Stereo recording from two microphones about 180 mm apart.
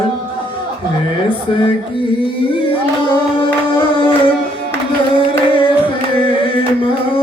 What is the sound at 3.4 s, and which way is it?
Music, 30° left (ahead or behind).